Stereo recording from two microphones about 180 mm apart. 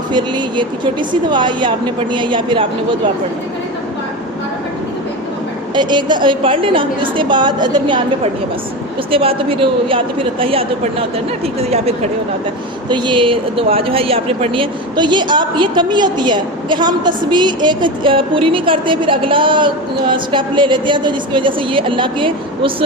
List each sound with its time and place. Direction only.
0.1 s speech: 25° right (ahead or behind)
5.7 s a woman's voice: 25° right (ahead or behind)
12.9 s speech: 25° right (ahead or behind)